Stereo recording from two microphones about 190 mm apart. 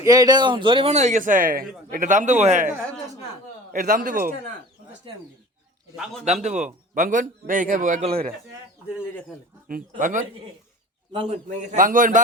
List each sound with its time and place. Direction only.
0.0 s a man's voice: 20° right (ahead or behind); by 2.6 s 40° right (ahead or behind)
3.7 s a man's voice: 45° right (ahead or behind)
6.2 s a man's voice: 40° right (ahead or behind)
9.6 s a man's voice: 45° right (ahead or behind)
11.1 s a man's voice: 30° right (ahead or behind)